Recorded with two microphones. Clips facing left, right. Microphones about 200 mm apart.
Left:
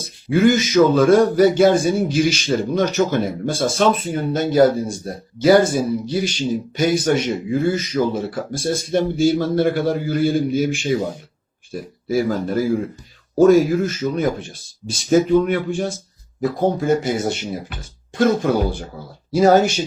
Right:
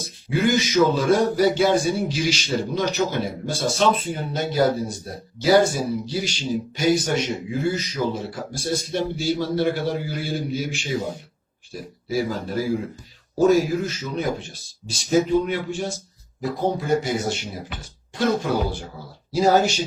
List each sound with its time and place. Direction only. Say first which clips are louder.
0.3 s a man's voice: left 6 dB; 50° left (ahead or behind)